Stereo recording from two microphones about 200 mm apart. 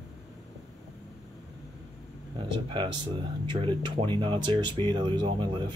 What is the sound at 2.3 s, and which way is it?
Speech, 25° right (ahead or behind).